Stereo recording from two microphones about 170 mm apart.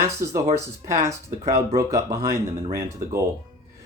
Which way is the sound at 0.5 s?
15° right (ahead or behind).